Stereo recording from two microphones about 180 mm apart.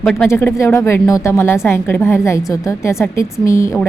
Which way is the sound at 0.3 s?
15° left (ahead or behind).